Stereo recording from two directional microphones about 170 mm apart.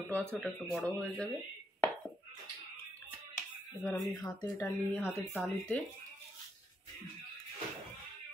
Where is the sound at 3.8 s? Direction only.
5° left (ahead or behind).